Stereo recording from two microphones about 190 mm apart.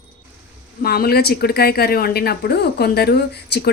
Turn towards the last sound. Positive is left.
turn(degrees=60)  # may be behind; listen again after turning